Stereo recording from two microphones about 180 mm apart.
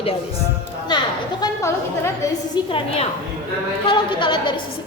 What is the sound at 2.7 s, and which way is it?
A woman's voice, 35° left (ahead or behind).